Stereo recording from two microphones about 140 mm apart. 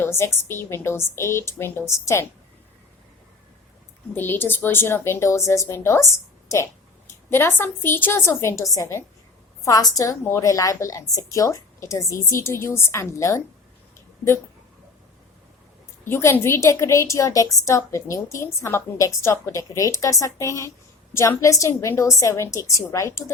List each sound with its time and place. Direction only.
0.0 s a woman's voice: 20° left (ahead or behind)
4.1 s a woman's voice: 15° left (ahead or behind)
7.3 s a woman's voice: 15° left (ahead or behind)
16.0 s a woman's voice: 15° left (ahead or behind)